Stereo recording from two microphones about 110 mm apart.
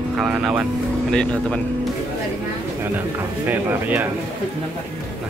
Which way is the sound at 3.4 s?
15° right (ahead or behind).